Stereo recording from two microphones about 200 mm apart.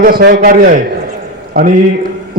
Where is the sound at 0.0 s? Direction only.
45° right (ahead or behind).